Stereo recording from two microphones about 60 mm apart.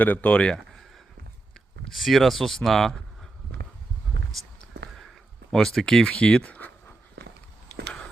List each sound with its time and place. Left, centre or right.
0.0 s speech: left
0.5 s a sound: centre
1.9 s speech: centre
5.5 s speech: centre; by 6.9 s left